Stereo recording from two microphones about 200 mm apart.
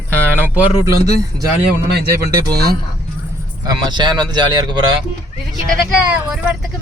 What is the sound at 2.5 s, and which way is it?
Speech, 50° right (ahead or behind).